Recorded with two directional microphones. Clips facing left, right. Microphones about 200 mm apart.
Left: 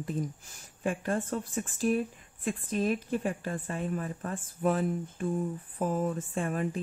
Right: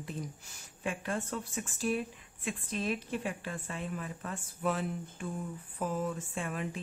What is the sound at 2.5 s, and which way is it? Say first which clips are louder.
A woman's voice: left 5 dB; 45° left (ahead or behind).